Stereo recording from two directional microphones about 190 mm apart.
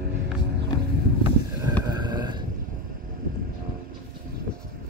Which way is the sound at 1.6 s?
20° right (ahead or behind).